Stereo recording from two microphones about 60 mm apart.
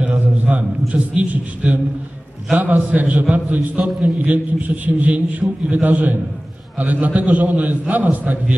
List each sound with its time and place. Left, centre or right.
0.0 s a man's voice: right